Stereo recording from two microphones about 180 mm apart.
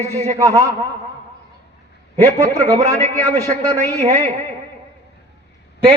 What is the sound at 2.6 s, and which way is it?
Speech, 35° right (ahead or behind).